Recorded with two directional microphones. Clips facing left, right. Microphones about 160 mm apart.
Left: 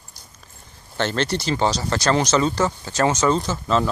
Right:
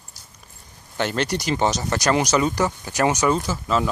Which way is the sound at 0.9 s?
10° right (ahead or behind).